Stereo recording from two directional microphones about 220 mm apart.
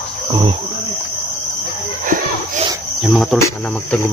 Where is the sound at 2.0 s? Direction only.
35° right (ahead or behind).